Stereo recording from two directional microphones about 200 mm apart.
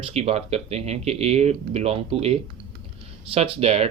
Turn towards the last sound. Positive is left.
turn(degrees=-30)  # may be behind; listen again after turning